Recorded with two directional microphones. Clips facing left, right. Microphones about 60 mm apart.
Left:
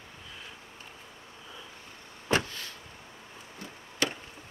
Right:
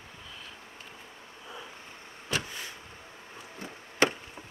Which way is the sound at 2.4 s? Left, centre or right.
Centre.